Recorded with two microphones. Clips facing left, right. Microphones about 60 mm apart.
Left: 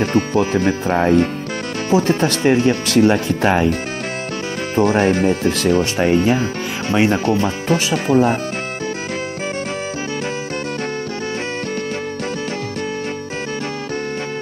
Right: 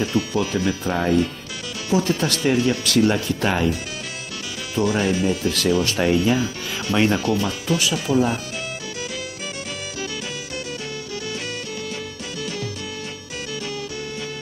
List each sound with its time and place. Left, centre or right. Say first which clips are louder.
0.0 s speech: left 5 dB; left
4.7 s speech: left 5 dB; left